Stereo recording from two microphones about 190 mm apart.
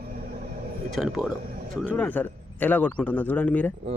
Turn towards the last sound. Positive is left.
turn(degrees=10)  # may be behind; listen again after turning